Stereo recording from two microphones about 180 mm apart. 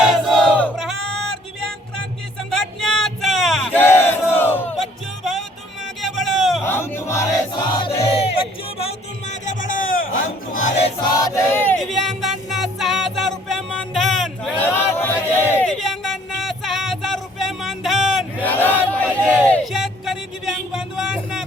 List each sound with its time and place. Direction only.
0.0 s music: centre (ahead or behind)
2.5 s battle cry: centre (ahead or behind)
5.2 s music: centre (ahead or behind)
6.7 s music: 15° left (ahead or behind); by 8.3 s 30° left (ahead or behind)
9.5 s a sound: 45° left (ahead or behind)
10.5 s music: 35° left (ahead or behind)
11.0 s music: 20° left (ahead or behind); by 18.4 s centre (ahead or behind)
18.4 s battle cry: 10° left (ahead or behind)
19.5 s a sound: 5° left (ahead or behind)